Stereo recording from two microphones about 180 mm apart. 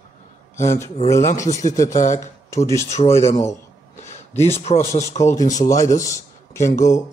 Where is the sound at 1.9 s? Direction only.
40° left (ahead or behind).